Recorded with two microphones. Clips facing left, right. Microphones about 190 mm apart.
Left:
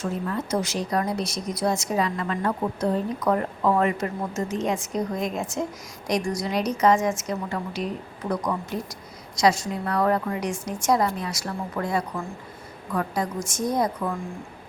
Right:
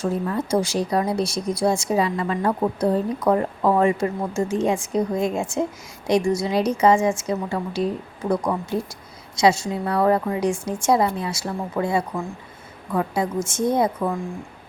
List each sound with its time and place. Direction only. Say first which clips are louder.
0.5 s a woman's voice: right 4 dB; 30° right (ahead or behind)